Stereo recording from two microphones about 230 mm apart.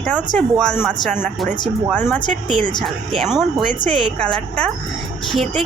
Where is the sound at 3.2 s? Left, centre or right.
Centre.